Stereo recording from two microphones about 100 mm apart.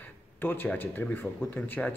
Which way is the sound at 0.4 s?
20° left (ahead or behind).